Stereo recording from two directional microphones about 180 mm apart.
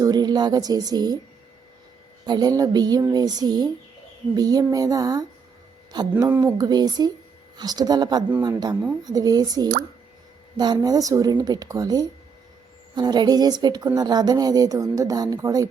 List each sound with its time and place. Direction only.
0.0 s a woman's voice: 20° right (ahead or behind)
2.2 s a woman's voice: 20° right (ahead or behind)
6.2 s speech: 10° right (ahead or behind)
6.6 s a woman's voice: 20° right (ahead or behind)